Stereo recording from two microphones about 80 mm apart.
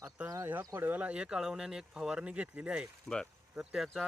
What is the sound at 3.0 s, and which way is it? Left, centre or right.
Speech, centre.